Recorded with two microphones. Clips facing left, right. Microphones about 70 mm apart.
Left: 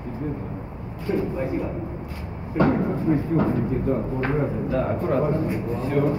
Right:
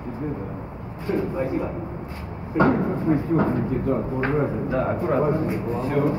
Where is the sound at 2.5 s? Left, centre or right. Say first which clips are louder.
Right 1 dB; right.